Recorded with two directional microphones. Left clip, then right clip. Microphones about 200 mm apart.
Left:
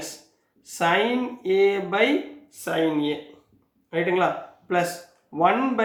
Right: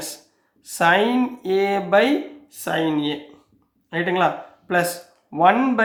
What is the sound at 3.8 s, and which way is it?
Speech, 40° right (ahead or behind).